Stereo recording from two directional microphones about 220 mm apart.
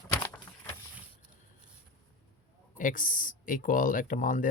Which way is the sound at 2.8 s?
35° left (ahead or behind).